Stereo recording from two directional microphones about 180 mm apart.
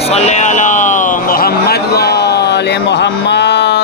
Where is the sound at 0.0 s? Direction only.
35° left (ahead or behind).